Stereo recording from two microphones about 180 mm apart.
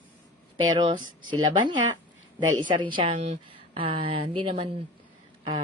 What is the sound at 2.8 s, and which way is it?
Speech, 25° right (ahead or behind).